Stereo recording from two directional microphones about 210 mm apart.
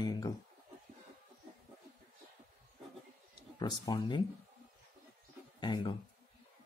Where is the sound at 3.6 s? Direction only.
20° left (ahead or behind).